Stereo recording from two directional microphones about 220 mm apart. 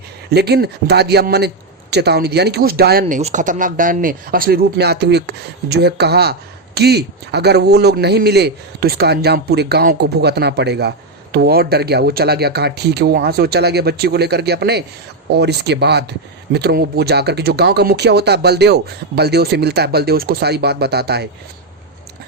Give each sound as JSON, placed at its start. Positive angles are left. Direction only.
{"t": 0.3, "sound": "a man's voice", "side_deg": -45}
{"t": 3.2, "sound": "a man's voice", "side_deg": -30}